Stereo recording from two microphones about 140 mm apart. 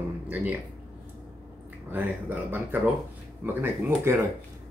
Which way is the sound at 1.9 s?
15° right (ahead or behind).